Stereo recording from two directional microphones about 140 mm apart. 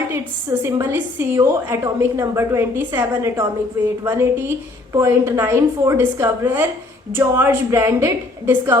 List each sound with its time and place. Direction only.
0.6 s a woman's voice: 15° right (ahead or behind)